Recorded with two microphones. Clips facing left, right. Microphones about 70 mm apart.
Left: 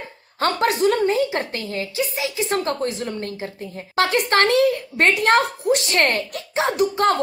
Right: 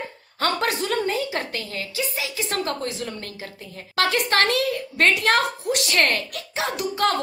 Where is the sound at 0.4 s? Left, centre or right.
Left.